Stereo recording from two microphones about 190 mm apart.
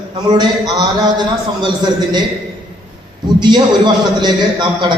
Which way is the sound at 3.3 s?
20° right (ahead or behind).